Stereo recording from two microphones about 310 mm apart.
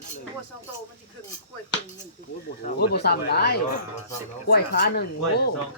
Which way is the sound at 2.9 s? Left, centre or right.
Left.